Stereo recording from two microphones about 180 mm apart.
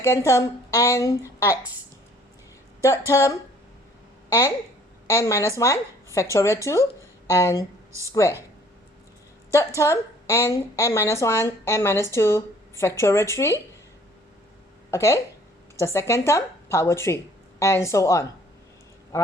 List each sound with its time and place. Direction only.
0.0 s a woman's voice: 15° left (ahead or behind)
3.1 s a woman's voice: 15° left (ahead or behind)
9.5 s a woman's voice: 15° left (ahead or behind)
14.8 s a woman's voice: 15° left (ahead or behind)